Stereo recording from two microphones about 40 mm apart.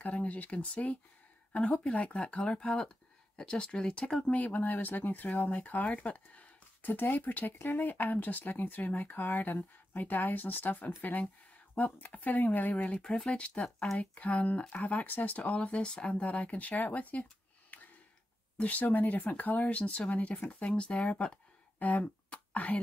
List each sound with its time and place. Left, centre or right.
0.0 s speech: left; by 4.2 s centre
4.3 s speech: left
13.3 s speech: left
16.2 s speech: left
20.6 s speech: left
21.7 s a sound: left